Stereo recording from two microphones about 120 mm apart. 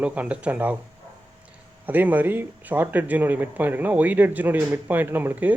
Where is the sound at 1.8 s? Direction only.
15° right (ahead or behind).